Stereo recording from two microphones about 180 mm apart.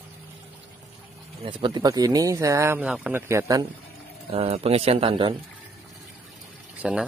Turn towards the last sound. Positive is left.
turn(degrees=-5)  # may be behind; listen again after turning